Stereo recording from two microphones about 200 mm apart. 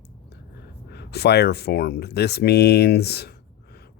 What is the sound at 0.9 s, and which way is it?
Speech, 55° left (ahead or behind).